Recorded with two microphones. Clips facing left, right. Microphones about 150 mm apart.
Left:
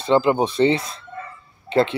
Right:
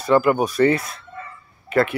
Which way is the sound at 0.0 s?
25° left (ahead or behind).